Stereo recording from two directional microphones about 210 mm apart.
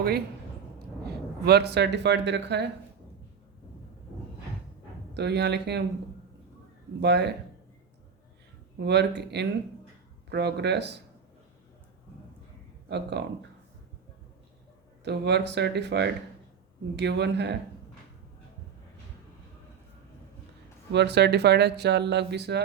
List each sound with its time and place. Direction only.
1.5 s speech: 50° right (ahead or behind)
5.1 s speech: 55° right (ahead or behind)
7.0 s speech: 55° right (ahead or behind)
8.8 s speech: 55° right (ahead or behind)
12.9 s speech: 55° right (ahead or behind)
15.0 s speech: 55° right (ahead or behind)
20.9 s speech: 55° right (ahead or behind)